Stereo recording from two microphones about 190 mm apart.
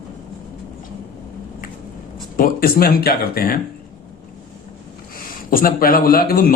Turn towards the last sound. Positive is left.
turn(degrees=50)  # may be behind; listen again after turning